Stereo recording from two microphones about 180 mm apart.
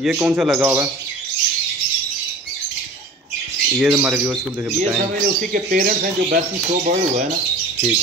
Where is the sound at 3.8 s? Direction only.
5° right (ahead or behind).